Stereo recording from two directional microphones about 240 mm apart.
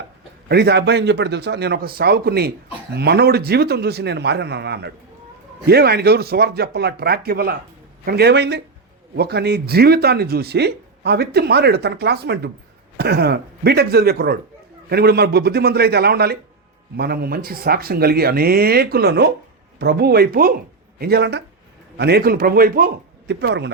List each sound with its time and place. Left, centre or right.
0.4 s a man's voice: right